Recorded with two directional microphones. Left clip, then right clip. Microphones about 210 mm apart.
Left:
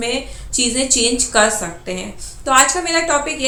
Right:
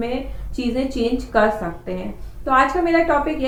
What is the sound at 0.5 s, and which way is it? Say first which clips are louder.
A woman's voice: left 6 dB; 10° left (ahead or behind).